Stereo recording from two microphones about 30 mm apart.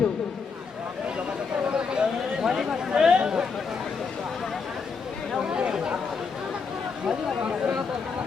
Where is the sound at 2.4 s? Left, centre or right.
Centre.